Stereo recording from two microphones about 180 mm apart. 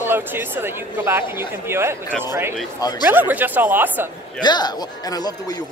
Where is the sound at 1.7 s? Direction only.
15° right (ahead or behind).